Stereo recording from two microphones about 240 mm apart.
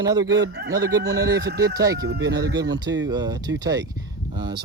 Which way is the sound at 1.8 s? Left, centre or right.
Centre.